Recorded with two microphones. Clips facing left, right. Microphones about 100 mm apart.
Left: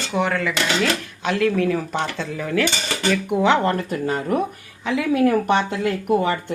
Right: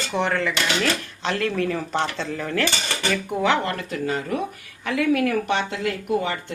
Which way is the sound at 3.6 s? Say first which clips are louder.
Left 5 dB; 40° left (ahead or behind).